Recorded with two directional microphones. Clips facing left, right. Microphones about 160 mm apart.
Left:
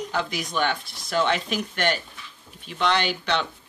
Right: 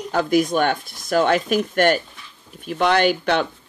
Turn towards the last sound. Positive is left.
turn(degrees=-50)  # may be behind; listen again after turning